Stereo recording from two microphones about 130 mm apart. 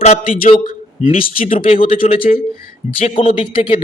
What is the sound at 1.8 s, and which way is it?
Speech, 80° left.